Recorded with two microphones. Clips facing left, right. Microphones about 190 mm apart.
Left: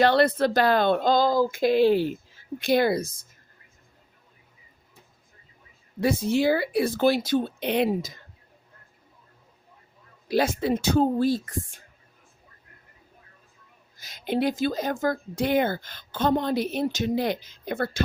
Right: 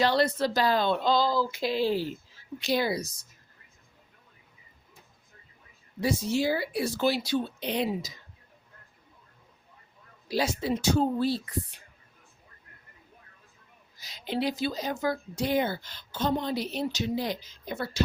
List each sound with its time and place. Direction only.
0.0 s speech: 55° left (ahead or behind)
6.0 s speech: 55° left (ahead or behind)
10.2 s speech: 55° left (ahead or behind)
13.9 s speech: 50° left (ahead or behind)